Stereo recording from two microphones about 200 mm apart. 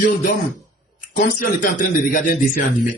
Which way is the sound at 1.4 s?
40° left (ahead or behind).